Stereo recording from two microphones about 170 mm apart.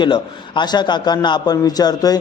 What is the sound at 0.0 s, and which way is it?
Speech, 25° left (ahead or behind).